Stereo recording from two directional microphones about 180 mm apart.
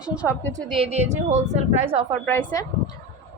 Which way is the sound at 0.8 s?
40° right (ahead or behind).